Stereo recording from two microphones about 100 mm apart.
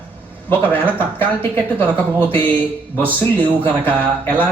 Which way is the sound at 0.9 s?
20° left (ahead or behind).